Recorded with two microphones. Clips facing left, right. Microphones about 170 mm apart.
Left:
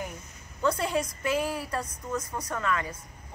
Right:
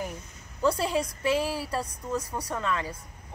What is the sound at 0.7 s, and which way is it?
A woman's voice, 30° right (ahead or behind).